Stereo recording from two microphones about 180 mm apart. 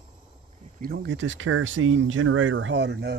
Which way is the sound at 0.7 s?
60° right (ahead or behind).